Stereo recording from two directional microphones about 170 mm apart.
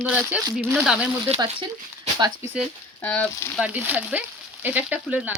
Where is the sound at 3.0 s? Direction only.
10° left (ahead or behind).